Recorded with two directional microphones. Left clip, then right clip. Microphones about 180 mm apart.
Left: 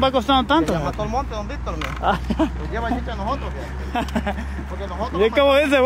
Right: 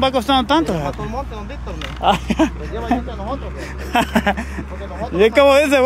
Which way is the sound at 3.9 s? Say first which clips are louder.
Right 8 dB; 40° right (ahead or behind).